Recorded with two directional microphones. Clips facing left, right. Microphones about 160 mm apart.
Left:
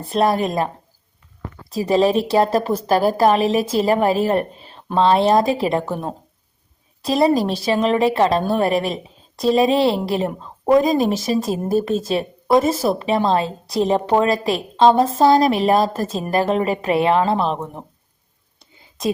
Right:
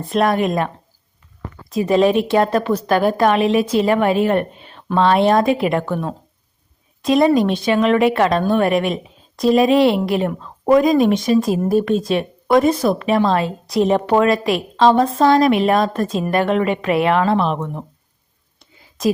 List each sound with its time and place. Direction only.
0.1 s a woman's voice: 30° left (ahead or behind)
1.7 s a woman's voice: 35° left (ahead or behind)